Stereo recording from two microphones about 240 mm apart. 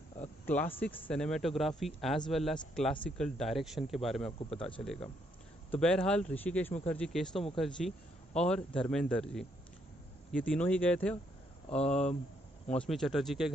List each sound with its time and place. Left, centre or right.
0.5 s speech: centre
11.7 s speech: left
12.6 s speech: centre